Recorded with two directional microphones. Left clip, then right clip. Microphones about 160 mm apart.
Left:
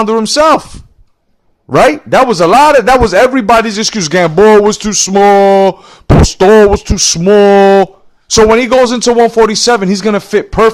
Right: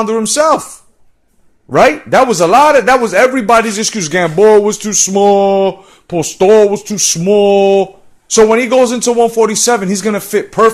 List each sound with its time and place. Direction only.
0.0 s a man's voice: 40° left (ahead or behind)
1.7 s a man's voice: 35° left (ahead or behind)